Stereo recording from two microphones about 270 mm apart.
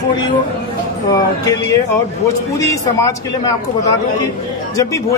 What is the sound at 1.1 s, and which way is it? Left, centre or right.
Speech, centre.